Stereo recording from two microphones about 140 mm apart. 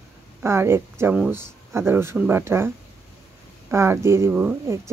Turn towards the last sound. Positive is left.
turn(degrees=-10)  # may be behind; listen again after turning